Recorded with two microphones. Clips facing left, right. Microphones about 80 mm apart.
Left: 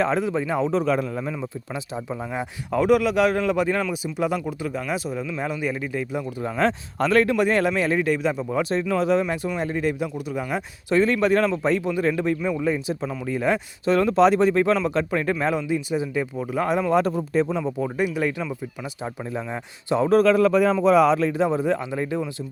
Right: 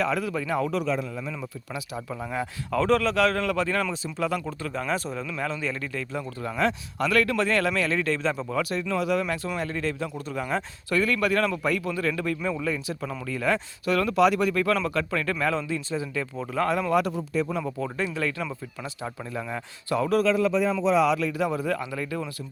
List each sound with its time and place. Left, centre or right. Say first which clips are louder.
0.0 s speech: left 4 dB; left
0.9 s a man's voice: left 5 dB; left
1.7 s a man's voice: left 2 dB; left
6.6 s speech: left 3 dB; left; by 8.6 s centre
8.9 s a man's voice: left 5 dB; left
17.0 s a man's voice: left 5 dB; left
17.6 s a man's voice: left 5 dB; centre
20.1 s a man's voice: left 6 dB; left
21.1 s speech: left 5 dB; left